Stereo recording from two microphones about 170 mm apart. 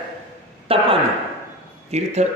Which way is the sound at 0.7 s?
35° right (ahead or behind).